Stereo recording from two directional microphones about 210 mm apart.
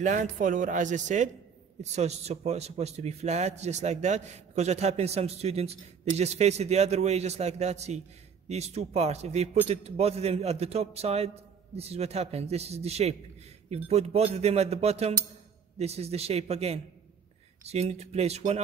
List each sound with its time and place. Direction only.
0.0 s a man's voice: 35° right (ahead or behind)